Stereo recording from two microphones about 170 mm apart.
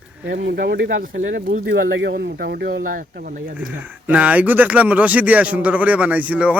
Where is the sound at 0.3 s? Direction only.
70° right (ahead or behind).